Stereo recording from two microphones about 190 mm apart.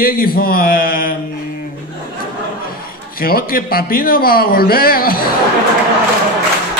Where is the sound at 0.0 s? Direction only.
50° left (ahead or behind).